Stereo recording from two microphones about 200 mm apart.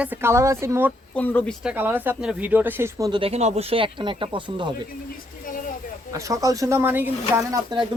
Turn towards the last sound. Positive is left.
turn(degrees=-20)  # may be behind; listen again after turning